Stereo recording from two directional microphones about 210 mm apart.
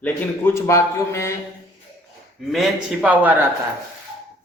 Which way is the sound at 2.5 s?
Centre (ahead or behind).